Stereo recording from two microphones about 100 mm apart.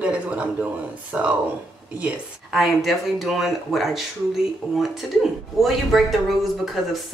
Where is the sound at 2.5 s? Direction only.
Centre (ahead or behind).